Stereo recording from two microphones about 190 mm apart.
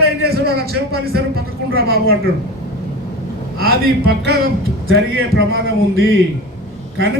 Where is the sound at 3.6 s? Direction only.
55° right (ahead or behind).